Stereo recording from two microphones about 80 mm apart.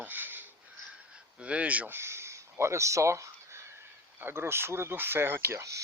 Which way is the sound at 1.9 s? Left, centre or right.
Right.